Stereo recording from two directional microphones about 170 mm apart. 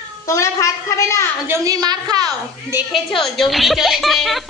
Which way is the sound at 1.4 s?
15° right (ahead or behind).